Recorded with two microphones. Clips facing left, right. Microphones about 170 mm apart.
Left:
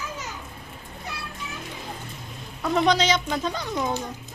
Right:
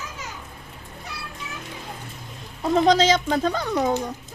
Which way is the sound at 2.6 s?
35° right (ahead or behind).